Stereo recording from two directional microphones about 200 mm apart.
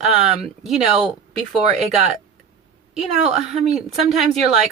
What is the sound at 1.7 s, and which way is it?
Speech, 35° right (ahead or behind).